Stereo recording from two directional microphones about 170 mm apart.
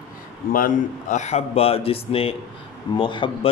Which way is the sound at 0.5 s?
55° left (ahead or behind).